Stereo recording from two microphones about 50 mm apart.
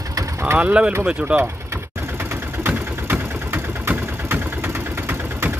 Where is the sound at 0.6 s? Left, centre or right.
Right.